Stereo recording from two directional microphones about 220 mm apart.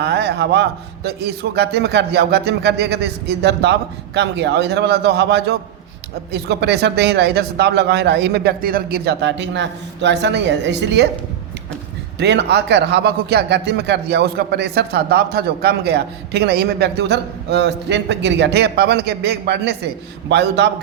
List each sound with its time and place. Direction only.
0.0 s a man's voice: 50° right (ahead or behind)
12.2 s a man's voice: 50° right (ahead or behind)